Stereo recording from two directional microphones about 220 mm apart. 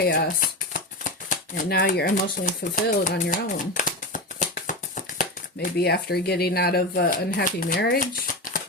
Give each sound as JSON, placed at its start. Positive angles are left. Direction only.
{"t": 0.0, "sound": "shuffling cards", "side_deg": 45}
{"t": 5.6, "sound": "speech", "side_deg": 45}